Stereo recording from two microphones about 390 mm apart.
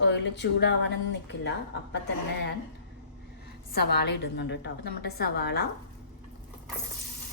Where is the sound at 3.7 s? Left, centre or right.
Left.